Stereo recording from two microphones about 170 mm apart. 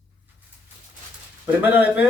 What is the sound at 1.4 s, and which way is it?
Speech, 10° right (ahead or behind).